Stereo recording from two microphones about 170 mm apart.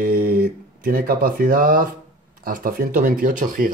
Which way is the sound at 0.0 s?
60° right (ahead or behind).